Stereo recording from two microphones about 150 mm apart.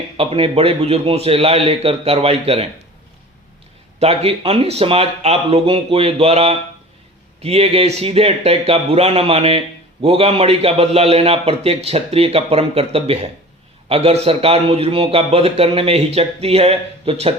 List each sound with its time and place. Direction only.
0.2 s speech: 40° right (ahead or behind)
4.0 s speech: 40° right (ahead or behind)